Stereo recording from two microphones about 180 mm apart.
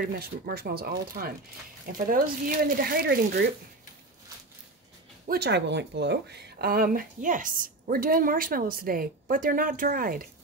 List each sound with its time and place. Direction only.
0.0 s speech: 55° right (ahead or behind)
5.3 s speech: 65° right (ahead or behind)